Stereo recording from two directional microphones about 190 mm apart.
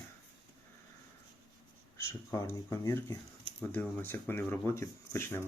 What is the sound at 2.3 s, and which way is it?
Speech, 15° left (ahead or behind).